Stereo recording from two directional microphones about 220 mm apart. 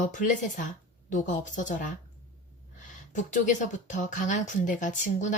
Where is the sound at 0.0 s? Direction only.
35° left (ahead or behind).